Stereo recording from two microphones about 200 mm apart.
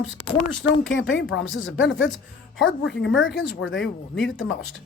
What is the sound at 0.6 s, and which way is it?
Speech, 70° left (ahead or behind).